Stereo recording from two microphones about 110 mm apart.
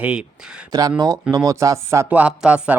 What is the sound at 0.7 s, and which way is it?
Speech, 35° right (ahead or behind).